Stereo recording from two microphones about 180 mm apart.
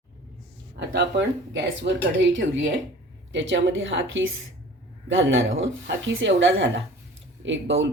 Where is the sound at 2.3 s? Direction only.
90° right.